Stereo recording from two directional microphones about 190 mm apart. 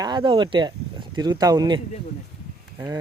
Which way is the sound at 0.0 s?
25° right (ahead or behind).